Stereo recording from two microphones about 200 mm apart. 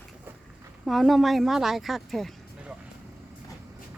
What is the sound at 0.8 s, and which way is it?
Speech, centre (ahead or behind).